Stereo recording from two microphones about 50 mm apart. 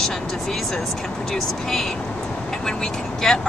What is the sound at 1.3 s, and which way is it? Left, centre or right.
Speech, centre.